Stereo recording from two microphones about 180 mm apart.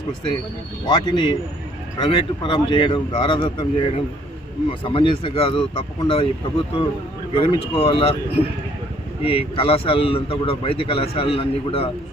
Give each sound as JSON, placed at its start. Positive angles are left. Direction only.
{"t": 0.9, "sound": "speech", "side_deg": 25}
{"t": 7.3, "sound": "a man's voice", "side_deg": 30}
{"t": 9.2, "sound": "a man's voice", "side_deg": 30}